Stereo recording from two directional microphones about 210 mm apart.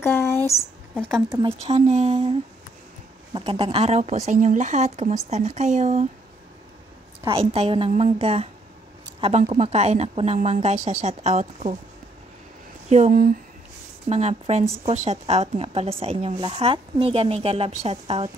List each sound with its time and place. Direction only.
0.0 s a sound: 10° left (ahead or behind)
1.6 s speech: 30° right (ahead or behind)
3.3 s speech: 30° right (ahead or behind)
7.2 s speech: 25° right (ahead or behind)
12.9 s speech: 40° right (ahead or behind)
14.0 s speech: 30° right (ahead or behind)